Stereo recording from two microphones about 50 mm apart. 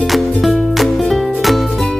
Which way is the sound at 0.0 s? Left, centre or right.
Centre.